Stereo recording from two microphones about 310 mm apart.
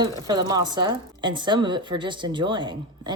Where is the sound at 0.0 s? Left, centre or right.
Centre.